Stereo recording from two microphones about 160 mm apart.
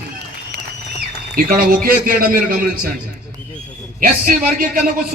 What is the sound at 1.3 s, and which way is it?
A man's voice, 65° right (ahead or behind).